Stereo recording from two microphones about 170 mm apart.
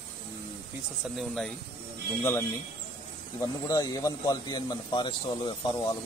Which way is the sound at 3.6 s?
20° left (ahead or behind).